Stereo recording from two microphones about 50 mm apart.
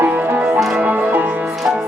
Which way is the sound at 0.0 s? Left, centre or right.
Right.